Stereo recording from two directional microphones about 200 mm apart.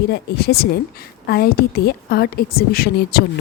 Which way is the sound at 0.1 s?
50° left (ahead or behind).